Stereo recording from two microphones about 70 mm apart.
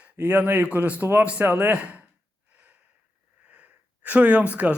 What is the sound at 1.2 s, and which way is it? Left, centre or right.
Speech, right.